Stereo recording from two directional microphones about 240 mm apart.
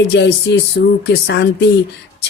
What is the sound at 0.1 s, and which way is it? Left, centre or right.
Speech, left.